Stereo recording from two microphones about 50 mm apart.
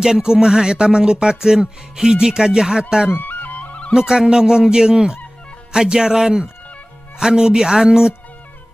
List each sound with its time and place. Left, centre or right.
0.0 s music: centre
3.1 s music: left
3.9 s music: centre